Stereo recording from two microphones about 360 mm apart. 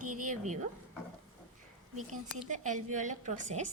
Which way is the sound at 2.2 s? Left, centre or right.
Right.